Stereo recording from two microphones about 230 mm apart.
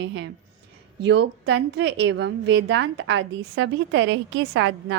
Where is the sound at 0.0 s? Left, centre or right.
Right.